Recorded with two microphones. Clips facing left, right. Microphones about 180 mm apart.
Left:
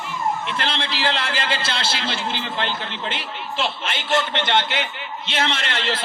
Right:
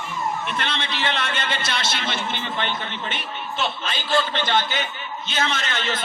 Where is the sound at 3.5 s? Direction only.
25° left (ahead or behind).